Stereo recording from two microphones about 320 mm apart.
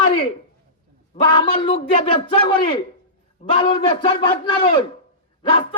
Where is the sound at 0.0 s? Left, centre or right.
Centre.